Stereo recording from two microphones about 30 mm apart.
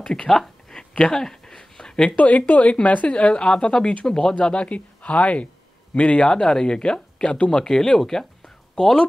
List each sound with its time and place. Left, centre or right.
0.0 s speech: left
0.3 s a sound: centre
2.1 s speech: left
3.1 s a woman's voice: left
3.4 s speech: left
4.4 s speech: left
6.2 s speech: left